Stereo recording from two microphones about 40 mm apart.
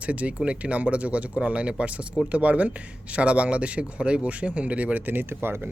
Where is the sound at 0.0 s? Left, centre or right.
Right.